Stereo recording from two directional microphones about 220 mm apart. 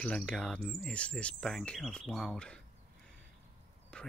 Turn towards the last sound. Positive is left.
turn(degrees=5)  # may be behind; listen again after turning